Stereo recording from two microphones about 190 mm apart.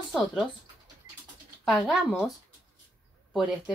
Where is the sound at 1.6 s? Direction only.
Centre (ahead or behind).